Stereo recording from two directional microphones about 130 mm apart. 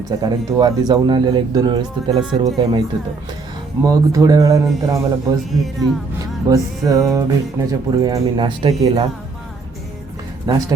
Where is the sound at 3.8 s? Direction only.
25° right (ahead or behind).